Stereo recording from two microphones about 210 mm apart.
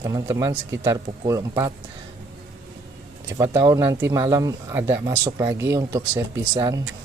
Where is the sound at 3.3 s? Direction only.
10° right (ahead or behind).